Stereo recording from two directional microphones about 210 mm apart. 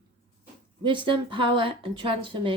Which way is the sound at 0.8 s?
25° right (ahead or behind).